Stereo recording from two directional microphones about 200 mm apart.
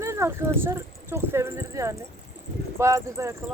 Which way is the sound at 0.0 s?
15° right (ahead or behind).